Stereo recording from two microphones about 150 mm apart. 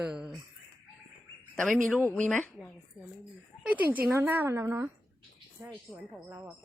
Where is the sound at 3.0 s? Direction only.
5° right (ahead or behind).